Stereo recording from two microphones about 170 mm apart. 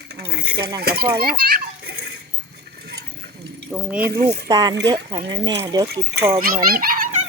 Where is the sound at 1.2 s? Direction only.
60° right (ahead or behind).